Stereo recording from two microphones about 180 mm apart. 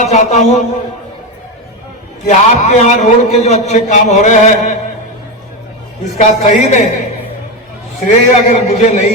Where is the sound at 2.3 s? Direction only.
40° left (ahead or behind).